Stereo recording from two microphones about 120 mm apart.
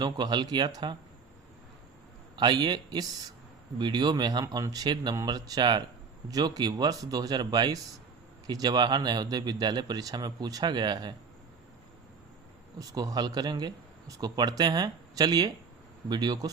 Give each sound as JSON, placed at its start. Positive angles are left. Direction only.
{"t": 0.0, "sound": "speech", "side_deg": -35}
{"t": 2.3, "sound": "speech", "side_deg": -40}
{"t": 12.8, "sound": "speech", "side_deg": -30}